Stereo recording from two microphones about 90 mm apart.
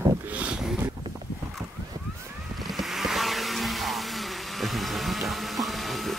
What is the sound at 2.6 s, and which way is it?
Vehicle, centre (ahead or behind).